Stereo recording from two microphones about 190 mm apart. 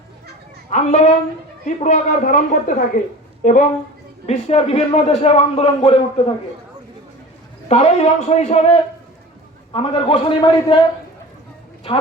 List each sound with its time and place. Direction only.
0.7 s a man's voice: 40° left (ahead or behind)
7.7 s a man's voice: 35° left (ahead or behind)